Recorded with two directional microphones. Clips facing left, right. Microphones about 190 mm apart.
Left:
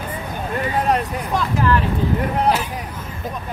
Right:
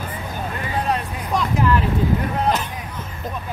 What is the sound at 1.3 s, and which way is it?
Vehicle, 20° right (ahead or behind).